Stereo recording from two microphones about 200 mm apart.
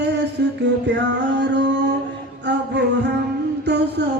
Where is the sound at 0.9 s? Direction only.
65° right (ahead or behind).